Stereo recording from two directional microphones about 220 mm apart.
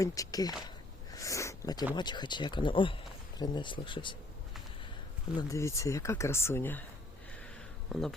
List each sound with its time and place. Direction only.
0.0 s speech: 15° left (ahead or behind)
1.1 s sniff: 15° left (ahead or behind)
2.0 s speech: 20° left (ahead or behind)
5.4 s speech: 15° left (ahead or behind)
7.9 s speech: centre (ahead or behind)